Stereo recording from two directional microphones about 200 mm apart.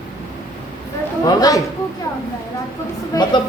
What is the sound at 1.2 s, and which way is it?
Speech, 20° left (ahead or behind).